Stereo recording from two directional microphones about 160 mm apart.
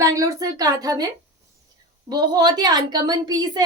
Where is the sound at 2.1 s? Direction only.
25° right (ahead or behind).